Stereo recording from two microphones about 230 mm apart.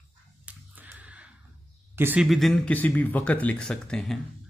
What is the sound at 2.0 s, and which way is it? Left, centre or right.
Speech, centre.